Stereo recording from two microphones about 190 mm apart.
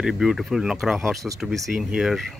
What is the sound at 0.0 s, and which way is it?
Speech, centre (ahead or behind).